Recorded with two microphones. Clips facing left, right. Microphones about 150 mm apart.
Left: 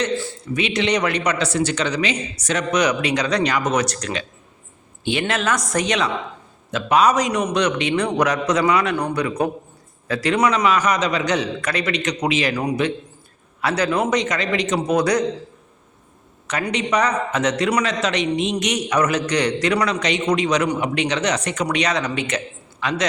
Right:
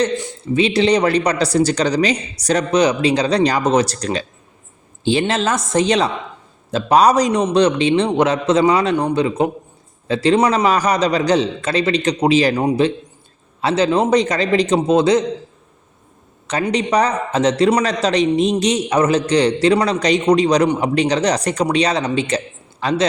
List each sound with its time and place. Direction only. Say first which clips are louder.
0.2 s a man's voice: right 6 dB; 20° right (ahead or behind)
16.5 s a man's voice: right 4 dB; 30° right (ahead or behind)